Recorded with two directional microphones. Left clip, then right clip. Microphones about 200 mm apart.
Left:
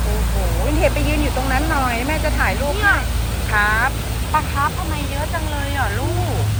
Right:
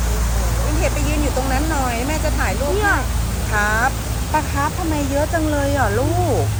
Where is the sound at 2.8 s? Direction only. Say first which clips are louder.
Left 2 dB; 45° right (ahead or behind).